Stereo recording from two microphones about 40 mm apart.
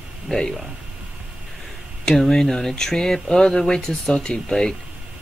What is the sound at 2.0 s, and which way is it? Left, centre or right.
Speech, centre.